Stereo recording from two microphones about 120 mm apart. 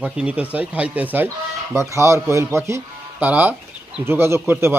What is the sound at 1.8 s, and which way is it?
A man's voice, 25° right (ahead or behind).